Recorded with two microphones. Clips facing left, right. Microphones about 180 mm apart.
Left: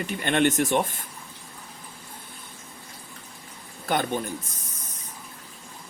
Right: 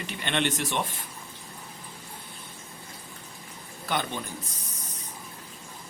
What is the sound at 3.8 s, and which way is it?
Speech, 50° left (ahead or behind).